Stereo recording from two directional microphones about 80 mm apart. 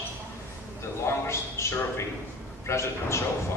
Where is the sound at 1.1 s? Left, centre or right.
Left.